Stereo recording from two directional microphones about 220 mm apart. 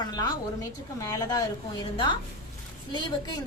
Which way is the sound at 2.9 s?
20° left (ahead or behind).